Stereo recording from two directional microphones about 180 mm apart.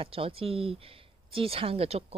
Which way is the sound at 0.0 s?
30° right (ahead or behind).